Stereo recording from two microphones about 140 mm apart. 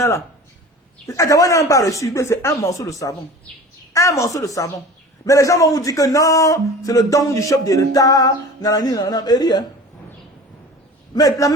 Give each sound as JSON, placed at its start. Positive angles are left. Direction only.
{"t": 1.0, "sound": "a man's voice", "side_deg": 25}
{"t": 11.1, "sound": "a man's voice", "side_deg": 25}